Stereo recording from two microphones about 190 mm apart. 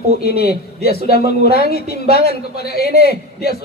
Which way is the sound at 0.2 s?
55° left (ahead or behind).